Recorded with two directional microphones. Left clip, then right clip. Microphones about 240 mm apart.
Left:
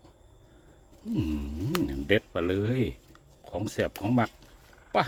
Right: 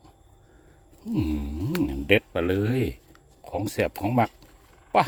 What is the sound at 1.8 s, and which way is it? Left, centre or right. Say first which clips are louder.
Speech: right 5 dB; centre.